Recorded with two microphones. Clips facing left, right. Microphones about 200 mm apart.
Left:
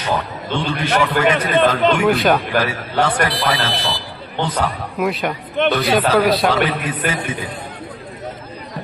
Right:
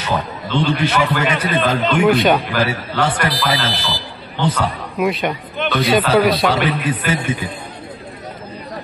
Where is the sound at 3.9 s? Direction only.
55° left (ahead or behind).